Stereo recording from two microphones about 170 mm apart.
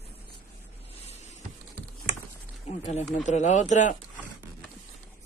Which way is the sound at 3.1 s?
45° left (ahead or behind).